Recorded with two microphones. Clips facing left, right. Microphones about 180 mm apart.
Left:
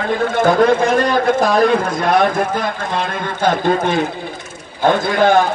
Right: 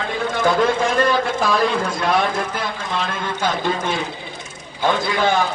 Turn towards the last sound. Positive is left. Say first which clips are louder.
# left 6 dB
turn(degrees=55)  # may be behind; listen again after turning